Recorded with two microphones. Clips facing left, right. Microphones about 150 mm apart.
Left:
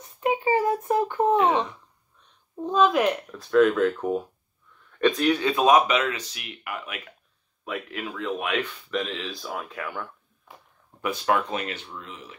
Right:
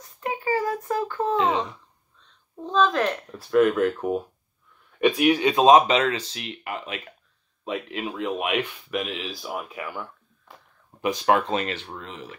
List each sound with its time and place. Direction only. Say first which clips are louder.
0.0 s a sound: left 5 dB; 20° left (ahead or behind)
2.6 s speech: left 1 dB; 10° left (ahead or behind)
3.3 s speech: even; 5° right (ahead or behind)
11.0 s speech: right 3 dB; 20° right (ahead or behind)